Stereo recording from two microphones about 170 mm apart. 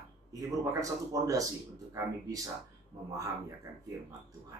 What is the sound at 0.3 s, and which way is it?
A man's voice, 20° right (ahead or behind).